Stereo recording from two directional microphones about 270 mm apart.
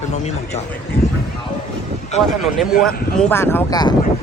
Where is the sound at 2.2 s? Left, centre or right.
Centre.